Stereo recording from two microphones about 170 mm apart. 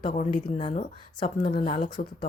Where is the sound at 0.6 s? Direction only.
40° left (ahead or behind).